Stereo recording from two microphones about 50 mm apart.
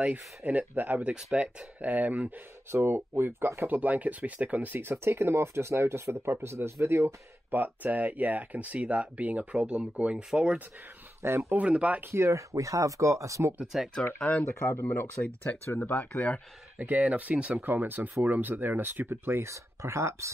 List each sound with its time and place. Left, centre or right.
0.5 s speech: right
1.1 s speech: centre
1.8 s speech: right
2.7 s speech: right
3.6 s speech: right
5.0 s speech: right
7.5 s speech: right; by 10.6 s centre
11.2 s speech: right
11.5 s speech: right
12.1 s speech: right
14.9 s speech: left
15.8 s speech: left
16.7 s speech: right
19.5 s speech: right